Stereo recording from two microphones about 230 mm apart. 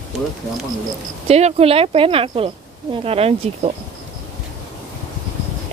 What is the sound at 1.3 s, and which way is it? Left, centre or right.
Speech, right.